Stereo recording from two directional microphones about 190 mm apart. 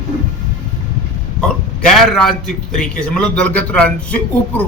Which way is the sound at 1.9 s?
5° left (ahead or behind).